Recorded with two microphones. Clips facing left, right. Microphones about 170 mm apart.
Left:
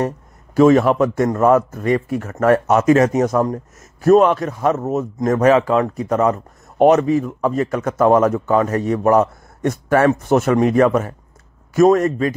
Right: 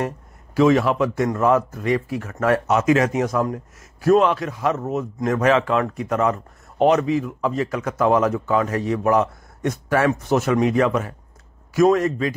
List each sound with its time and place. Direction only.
0.6 s speech: 45° left (ahead or behind)